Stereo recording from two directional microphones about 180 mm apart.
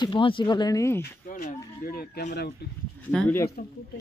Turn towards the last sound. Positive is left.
turn(degrees=5)  # may be behind; listen again after turning